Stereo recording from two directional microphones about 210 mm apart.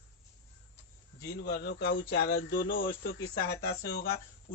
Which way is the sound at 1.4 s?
50° left (ahead or behind).